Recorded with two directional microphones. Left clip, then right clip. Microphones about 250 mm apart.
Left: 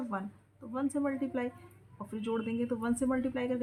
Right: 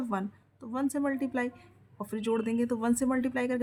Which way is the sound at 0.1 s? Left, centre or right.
Right.